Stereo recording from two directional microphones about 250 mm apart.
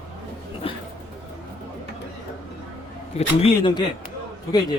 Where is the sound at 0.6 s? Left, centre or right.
Left.